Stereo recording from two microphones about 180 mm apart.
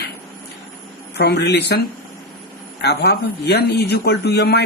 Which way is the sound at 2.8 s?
65° left (ahead or behind).